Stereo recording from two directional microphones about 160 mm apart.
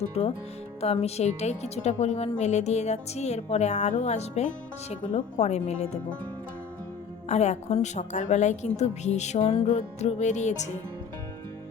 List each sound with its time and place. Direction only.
0.1 s speech: 35° left (ahead or behind)
7.3 s speech: 45° left (ahead or behind)